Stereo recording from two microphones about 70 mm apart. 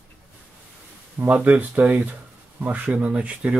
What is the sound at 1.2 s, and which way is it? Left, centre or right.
Speech, centre.